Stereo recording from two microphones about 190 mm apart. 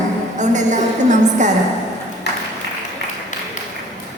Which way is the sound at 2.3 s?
60° left (ahead or behind).